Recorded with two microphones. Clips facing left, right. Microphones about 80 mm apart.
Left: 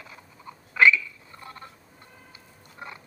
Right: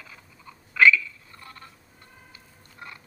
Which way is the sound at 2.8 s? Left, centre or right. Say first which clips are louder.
Left 2 dB; left.